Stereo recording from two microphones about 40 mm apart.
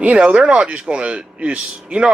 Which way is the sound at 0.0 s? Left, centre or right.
Right.